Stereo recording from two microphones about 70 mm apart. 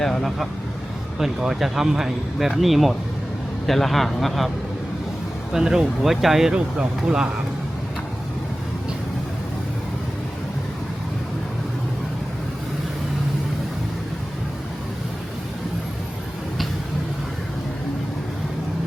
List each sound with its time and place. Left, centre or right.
0.0 s speech: centre
5.5 s speech: centre
6.5 s speech: centre